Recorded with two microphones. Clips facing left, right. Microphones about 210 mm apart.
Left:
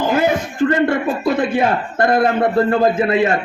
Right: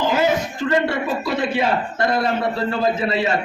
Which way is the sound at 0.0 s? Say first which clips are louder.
Left 2 dB; 50° left (ahead or behind).